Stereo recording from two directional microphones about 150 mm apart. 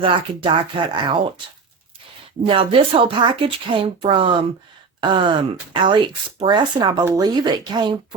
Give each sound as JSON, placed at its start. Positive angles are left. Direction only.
{"t": 0.0, "sound": "a woman's voice", "side_deg": -35}
{"t": 2.4, "sound": "a woman's voice", "side_deg": -40}